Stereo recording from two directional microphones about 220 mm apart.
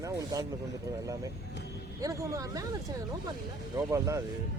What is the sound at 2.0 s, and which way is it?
Speech, 15° right (ahead or behind).